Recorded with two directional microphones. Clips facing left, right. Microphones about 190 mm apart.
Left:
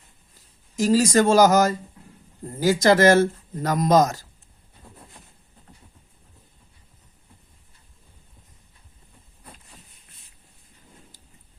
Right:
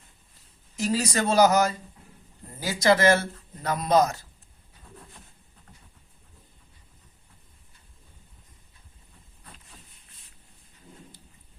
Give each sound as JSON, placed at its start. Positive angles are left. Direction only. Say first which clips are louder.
{"t": 0.8, "sound": "speech", "louder": "left 8 dB", "side_deg": 45}